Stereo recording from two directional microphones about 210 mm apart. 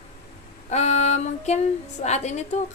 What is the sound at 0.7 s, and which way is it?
Female singing, 35° left (ahead or behind).